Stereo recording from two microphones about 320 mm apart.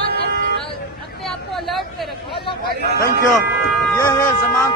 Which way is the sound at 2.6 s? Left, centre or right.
Right.